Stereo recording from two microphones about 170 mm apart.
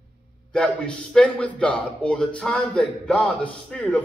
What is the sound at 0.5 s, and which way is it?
A man's voice, 5° left (ahead or behind).